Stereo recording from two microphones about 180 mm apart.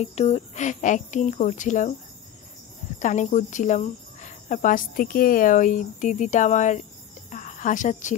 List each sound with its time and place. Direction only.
0.0 s speech: 35° left (ahead or behind)
3.0 s speech: 45° left (ahead or behind)
7.2 s a sound: 40° left (ahead or behind)